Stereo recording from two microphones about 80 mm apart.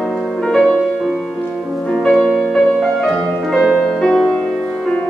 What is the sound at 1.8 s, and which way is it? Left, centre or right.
Music, centre.